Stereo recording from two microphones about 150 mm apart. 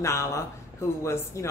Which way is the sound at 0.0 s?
20° left (ahead or behind).